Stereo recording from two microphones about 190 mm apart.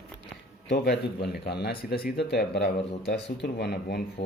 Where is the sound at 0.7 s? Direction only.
60° left (ahead or behind).